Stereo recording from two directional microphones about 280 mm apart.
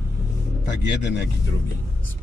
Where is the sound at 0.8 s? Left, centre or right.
Left.